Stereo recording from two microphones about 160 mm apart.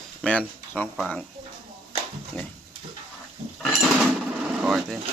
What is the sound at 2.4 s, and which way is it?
Speech, 10° left (ahead or behind).